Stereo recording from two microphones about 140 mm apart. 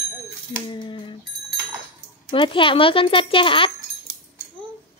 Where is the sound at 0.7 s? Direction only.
35° left (ahead or behind).